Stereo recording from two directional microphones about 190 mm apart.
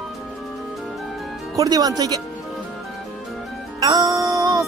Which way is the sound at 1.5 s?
20° right (ahead or behind).